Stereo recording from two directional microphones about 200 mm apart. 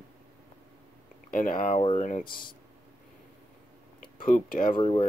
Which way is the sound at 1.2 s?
45° left (ahead or behind).